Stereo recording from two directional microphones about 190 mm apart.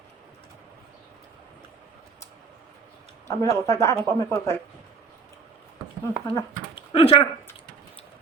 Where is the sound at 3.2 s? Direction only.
15° left (ahead or behind).